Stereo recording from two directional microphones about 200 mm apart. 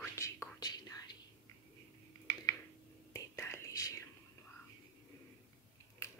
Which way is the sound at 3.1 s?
15° left (ahead or behind).